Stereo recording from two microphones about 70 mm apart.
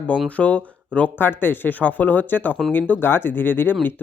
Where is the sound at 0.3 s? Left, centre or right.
Left.